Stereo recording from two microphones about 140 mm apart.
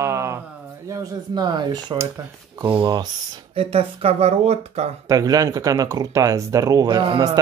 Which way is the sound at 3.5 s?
45° right (ahead or behind).